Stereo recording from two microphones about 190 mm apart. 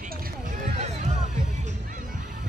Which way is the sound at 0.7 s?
35° right (ahead or behind).